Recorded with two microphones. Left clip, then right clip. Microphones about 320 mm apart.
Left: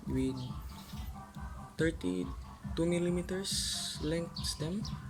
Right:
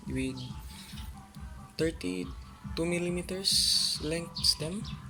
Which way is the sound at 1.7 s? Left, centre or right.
Right.